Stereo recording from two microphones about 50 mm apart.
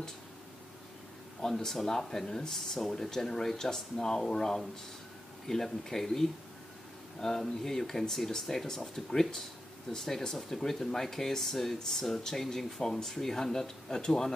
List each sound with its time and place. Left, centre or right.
1.4 s speech: centre